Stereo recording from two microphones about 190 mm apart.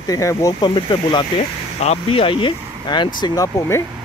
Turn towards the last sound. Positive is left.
turn(degrees=15)  # may be behind; listen again after turning